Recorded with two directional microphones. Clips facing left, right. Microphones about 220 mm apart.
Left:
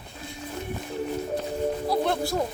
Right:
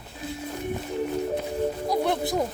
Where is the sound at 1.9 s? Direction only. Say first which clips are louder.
Right 1 dB; 15° right (ahead or behind).